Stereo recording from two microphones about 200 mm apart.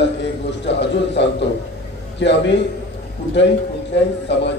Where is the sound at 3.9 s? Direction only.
60° left (ahead or behind).